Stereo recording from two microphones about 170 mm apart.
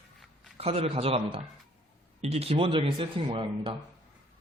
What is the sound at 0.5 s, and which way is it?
Speech, 35° right (ahead or behind).